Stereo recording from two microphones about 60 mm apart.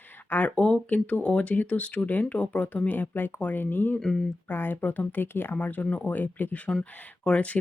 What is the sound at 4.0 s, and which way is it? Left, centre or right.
Speech, centre.